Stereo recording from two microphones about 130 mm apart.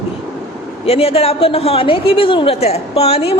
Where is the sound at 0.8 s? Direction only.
45° left (ahead or behind).